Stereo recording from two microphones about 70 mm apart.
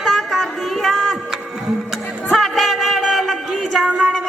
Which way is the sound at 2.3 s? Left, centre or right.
Centre.